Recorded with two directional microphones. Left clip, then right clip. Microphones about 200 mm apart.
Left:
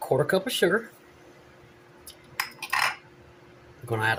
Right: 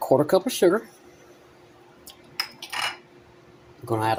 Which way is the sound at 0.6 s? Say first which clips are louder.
Right 3 dB; 35° right (ahead or behind).